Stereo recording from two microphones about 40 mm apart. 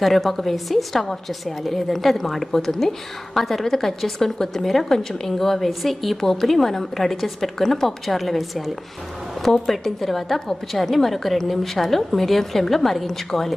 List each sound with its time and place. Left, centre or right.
0.0 s a woman's voice: centre